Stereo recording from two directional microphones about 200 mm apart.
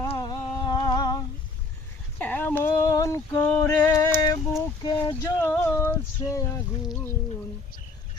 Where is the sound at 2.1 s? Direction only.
10° left (ahead or behind).